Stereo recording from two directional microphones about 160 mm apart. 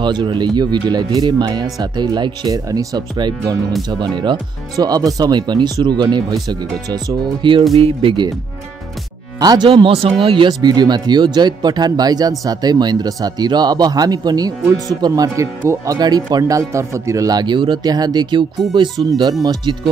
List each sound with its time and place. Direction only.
0.0 s speech: 30° right (ahead or behind)
9.4 s speech: 25° right (ahead or behind)